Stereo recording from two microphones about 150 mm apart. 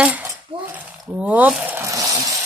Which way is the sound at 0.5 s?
35° right (ahead or behind).